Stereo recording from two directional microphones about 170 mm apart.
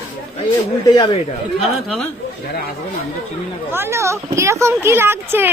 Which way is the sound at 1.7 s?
Centre (ahead or behind).